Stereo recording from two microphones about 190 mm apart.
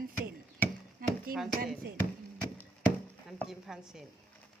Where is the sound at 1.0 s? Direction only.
50° right (ahead or behind).